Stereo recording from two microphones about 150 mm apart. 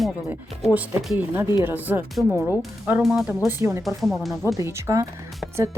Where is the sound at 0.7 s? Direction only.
10° right (ahead or behind).